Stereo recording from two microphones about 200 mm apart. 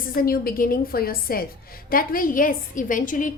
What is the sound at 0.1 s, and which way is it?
A woman's voice, 45° left (ahead or behind).